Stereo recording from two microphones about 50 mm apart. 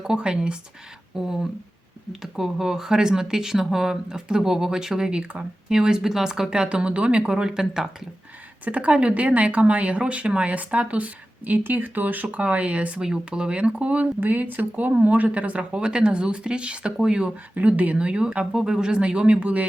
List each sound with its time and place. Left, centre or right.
0.0 s speech: centre
8.6 s speech: right
17.5 s speech: right